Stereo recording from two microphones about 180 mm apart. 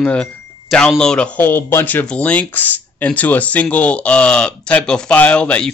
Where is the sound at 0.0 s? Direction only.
5° left (ahead or behind).